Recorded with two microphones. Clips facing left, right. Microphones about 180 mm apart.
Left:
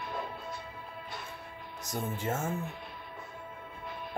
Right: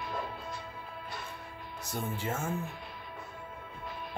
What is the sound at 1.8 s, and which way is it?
Speech, 45° left (ahead or behind).